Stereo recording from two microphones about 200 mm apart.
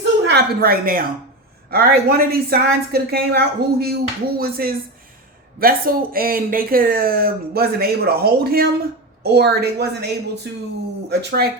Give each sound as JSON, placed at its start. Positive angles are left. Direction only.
{"t": 0.3, "sound": "a woman's voice", "side_deg": -50}